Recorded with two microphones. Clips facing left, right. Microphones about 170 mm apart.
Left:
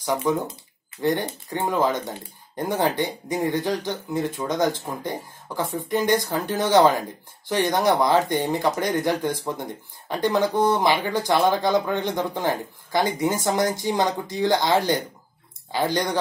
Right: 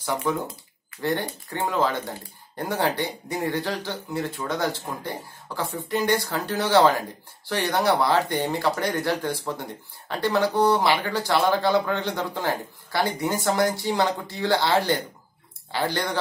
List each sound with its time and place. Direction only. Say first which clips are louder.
0.0 s speech: left 3 dB; 15° left (ahead or behind)